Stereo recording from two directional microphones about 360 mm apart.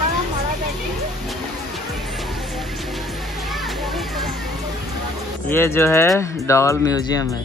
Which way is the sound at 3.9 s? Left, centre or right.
Centre.